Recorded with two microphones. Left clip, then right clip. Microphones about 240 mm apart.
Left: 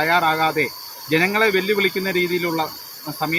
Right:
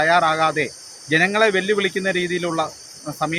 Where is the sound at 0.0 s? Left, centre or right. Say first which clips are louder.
Right 1 dB; centre.